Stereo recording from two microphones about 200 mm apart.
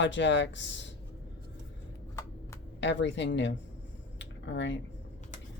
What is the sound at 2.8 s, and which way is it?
Speech, 65° left (ahead or behind).